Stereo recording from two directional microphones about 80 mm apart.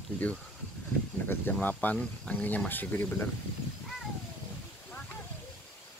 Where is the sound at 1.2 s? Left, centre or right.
Left.